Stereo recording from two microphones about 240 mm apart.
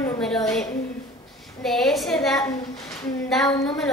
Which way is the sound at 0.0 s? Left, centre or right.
Centre.